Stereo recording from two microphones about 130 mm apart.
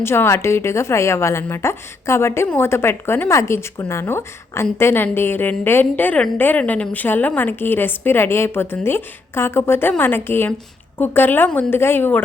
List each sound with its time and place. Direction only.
0.0 s a woman's voice: 20° left (ahead or behind)